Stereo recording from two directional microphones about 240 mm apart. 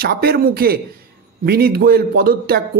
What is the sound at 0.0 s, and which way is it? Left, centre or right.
Speech, right.